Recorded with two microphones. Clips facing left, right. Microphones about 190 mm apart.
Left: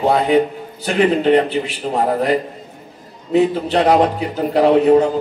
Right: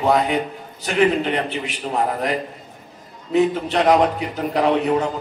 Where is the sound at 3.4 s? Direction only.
35° left (ahead or behind).